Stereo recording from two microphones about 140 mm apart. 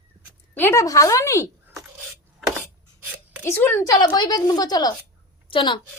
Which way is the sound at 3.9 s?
30° left (ahead or behind).